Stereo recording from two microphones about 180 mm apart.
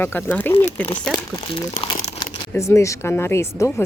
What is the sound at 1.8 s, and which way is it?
Crumpling, 30° left (ahead or behind).